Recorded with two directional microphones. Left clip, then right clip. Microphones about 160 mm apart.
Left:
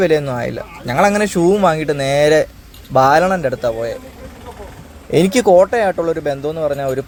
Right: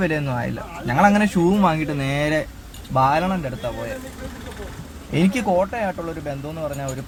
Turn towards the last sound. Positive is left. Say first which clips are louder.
# left 10 dB
turn(degrees=25)  # may be behind; listen again after turning